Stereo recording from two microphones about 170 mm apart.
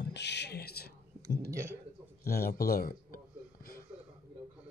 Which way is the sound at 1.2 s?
15° right (ahead or behind).